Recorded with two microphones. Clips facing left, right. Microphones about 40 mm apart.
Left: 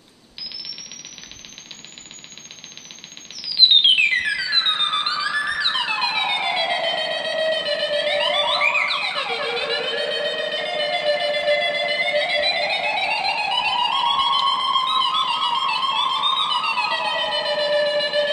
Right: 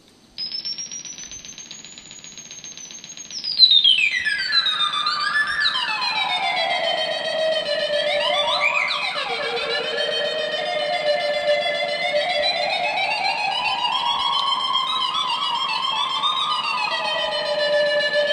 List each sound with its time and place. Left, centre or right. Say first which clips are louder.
3.9 s theremin: left 1 dB; centre
9.2 s music: even; centre
16.5 s shofar: left 2 dB; centre